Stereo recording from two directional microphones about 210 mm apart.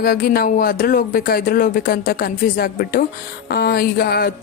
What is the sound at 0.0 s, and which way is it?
A woman's voice, 45° left (ahead or behind).